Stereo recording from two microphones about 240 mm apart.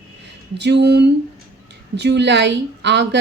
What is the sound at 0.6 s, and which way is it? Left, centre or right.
Speech, right.